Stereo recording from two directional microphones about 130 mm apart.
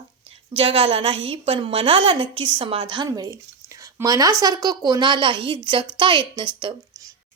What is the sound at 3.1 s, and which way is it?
Speech, 25° right (ahead or behind).